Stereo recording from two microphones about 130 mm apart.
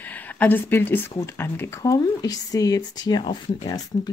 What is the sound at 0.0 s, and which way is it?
Speech, 10° left (ahead or behind).